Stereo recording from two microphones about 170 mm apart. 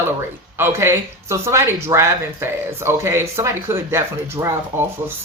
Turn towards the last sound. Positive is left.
turn(degrees=-15)  # may be behind; listen again after turning